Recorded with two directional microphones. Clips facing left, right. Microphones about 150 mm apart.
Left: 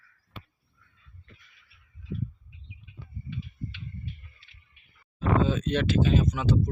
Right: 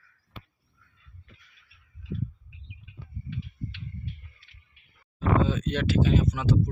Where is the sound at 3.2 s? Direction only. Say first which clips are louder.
Right 1 dB; 70° right (ahead or behind).